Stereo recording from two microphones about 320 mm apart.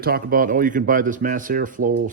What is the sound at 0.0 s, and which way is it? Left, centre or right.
Speech, right.